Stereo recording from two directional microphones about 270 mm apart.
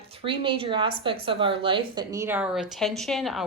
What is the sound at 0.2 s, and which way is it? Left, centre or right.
A woman's voice, centre.